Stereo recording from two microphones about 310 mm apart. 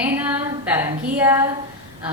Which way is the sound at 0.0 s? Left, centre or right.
Centre.